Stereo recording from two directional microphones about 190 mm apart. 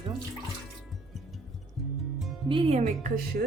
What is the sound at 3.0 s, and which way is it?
Speech, 55° right (ahead or behind).